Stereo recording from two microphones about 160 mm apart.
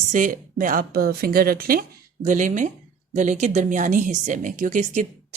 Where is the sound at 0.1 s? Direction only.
55° right (ahead or behind).